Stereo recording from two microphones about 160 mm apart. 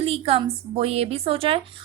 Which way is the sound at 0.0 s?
40° right (ahead or behind).